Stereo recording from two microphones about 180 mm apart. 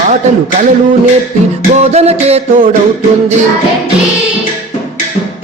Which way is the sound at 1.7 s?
35° right (ahead or behind).